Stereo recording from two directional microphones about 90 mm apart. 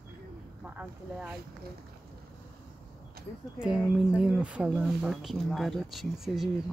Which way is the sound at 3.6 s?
5° right (ahead or behind).